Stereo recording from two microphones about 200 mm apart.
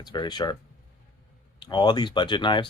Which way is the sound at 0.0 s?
20° left (ahead or behind).